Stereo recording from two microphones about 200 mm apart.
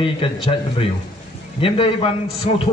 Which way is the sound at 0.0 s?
25° left (ahead or behind).